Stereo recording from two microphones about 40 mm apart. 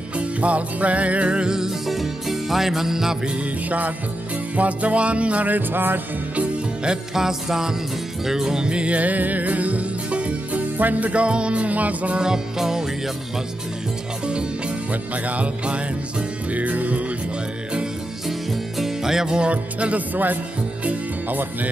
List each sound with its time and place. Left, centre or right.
0.2 s music: right
1.5 s music: centre
3.6 s music: right
5.7 s music: right
7.2 s music: centre; by 12.2 s right
12.2 s music: centre
14.9 s music: right
16.5 s music: right
18.5 s music: centre
19.5 s music: right
21.3 s music: right